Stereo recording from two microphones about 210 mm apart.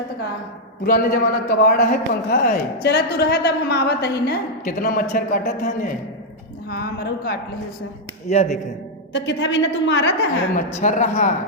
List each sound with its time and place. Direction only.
0.9 s a man's voice: 45° left (ahead or behind)
8.3 s speech: 30° left (ahead or behind)
9.1 s a woman's voice: 60° left (ahead or behind)
10.8 s speech: 35° left (ahead or behind)